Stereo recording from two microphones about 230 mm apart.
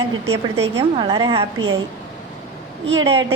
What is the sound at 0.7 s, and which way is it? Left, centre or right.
Speech, right.